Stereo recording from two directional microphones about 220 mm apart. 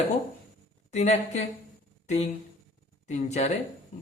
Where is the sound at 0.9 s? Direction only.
30° left (ahead or behind).